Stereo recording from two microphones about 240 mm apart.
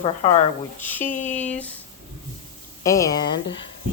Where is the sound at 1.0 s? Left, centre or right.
Left.